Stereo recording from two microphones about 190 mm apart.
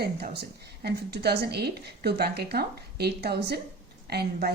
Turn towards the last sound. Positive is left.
turn(degrees=-55)  # may be behind; listen again after turning